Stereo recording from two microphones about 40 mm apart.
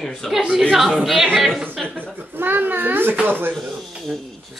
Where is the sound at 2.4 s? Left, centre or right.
Right.